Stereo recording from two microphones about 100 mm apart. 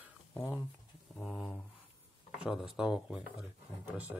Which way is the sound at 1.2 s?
5° right (ahead or behind).